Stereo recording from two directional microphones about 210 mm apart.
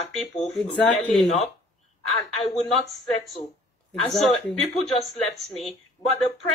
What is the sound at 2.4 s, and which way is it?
Speech, centre (ahead or behind).